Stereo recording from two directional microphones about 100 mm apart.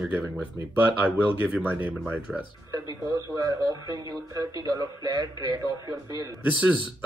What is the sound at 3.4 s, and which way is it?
Speech, 45° right (ahead or behind).